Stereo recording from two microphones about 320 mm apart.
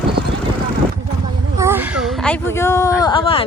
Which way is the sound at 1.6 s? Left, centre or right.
Centre.